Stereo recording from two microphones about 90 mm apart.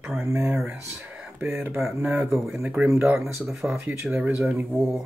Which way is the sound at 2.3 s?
5° right (ahead or behind).